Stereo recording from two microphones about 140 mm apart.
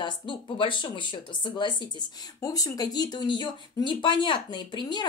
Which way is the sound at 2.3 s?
25° left (ahead or behind).